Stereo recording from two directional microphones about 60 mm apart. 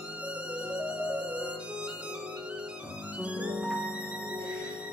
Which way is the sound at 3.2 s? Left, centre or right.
Right.